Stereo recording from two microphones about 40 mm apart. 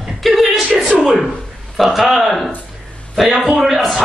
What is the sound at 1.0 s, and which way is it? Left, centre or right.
Speech, centre.